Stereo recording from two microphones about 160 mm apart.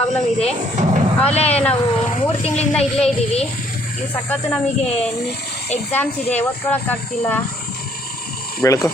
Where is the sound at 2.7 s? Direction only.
5° left (ahead or behind).